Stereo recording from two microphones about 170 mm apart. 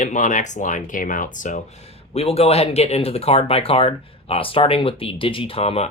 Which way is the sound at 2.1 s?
35° left (ahead or behind).